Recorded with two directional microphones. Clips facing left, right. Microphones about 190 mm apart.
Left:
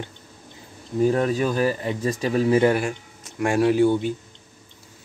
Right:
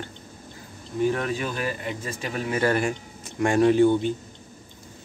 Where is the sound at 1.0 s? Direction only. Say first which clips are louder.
Left 5 dB; 35° left (ahead or behind).